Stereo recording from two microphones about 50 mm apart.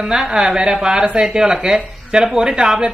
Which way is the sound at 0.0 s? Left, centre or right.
Centre.